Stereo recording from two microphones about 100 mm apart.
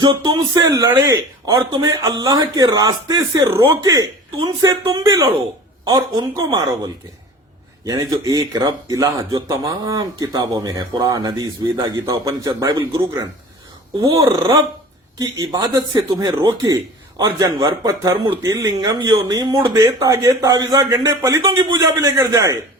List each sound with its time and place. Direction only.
0.0 s speech: 50° right (ahead or behind)
0.5 s a man's voice: 35° right (ahead or behind)
11.6 s speech: 45° right (ahead or behind)
12.0 s a man's voice: 35° right (ahead or behind)
12.6 s speech: 50° right (ahead or behind)
14.0 s a man's voice: 35° right (ahead or behind)